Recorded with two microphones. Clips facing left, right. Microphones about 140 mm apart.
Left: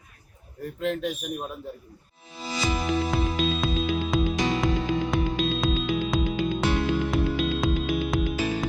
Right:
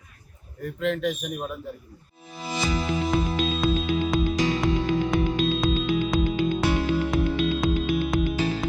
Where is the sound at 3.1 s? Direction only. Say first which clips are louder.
Right 1 dB; centre (ahead or behind).